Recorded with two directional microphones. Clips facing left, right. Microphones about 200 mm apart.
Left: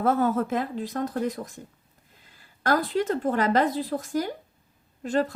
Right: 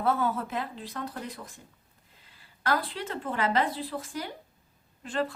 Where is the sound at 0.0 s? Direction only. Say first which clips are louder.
Left 5 dB; 45° left (ahead or behind).